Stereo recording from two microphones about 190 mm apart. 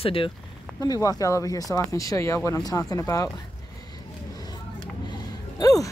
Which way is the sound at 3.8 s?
20° left (ahead or behind).